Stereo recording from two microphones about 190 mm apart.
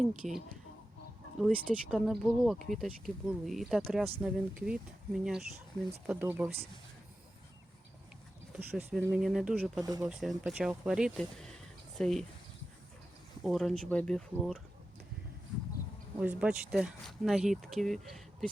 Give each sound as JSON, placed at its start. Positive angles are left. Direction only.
{"t": 0.0, "sound": "speech", "side_deg": -5}
{"t": 1.4, "sound": "speech", "side_deg": 0}
{"t": 8.5, "sound": "speech", "side_deg": -5}
{"t": 9.8, "sound": "speech", "side_deg": -20}
{"t": 10.1, "sound": "speech", "side_deg": 0}
{"t": 13.4, "sound": "speech", "side_deg": 0}
{"t": 16.2, "sound": "speech", "side_deg": -5}